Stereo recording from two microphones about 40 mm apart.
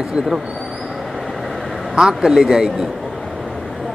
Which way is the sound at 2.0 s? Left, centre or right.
Centre.